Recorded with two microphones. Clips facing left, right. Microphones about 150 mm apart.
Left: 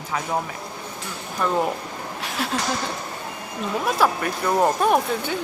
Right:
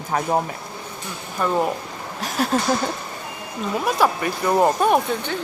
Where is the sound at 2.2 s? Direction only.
40° right (ahead or behind).